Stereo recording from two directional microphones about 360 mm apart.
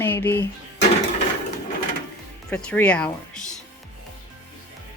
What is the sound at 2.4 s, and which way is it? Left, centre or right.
Speech, centre.